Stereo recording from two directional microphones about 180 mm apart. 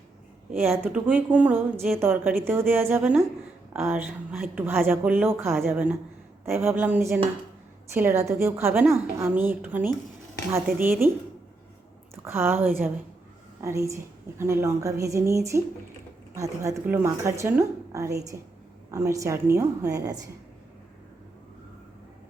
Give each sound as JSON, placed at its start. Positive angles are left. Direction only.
{"t": 0.6, "sound": "a woman's voice", "side_deg": -15}
{"t": 12.1, "sound": "a woman's voice", "side_deg": -15}